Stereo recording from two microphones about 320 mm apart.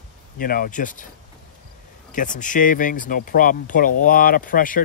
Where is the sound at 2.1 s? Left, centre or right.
Left.